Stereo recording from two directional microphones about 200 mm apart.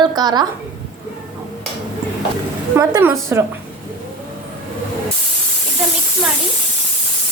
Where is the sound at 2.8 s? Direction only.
15° right (ahead or behind).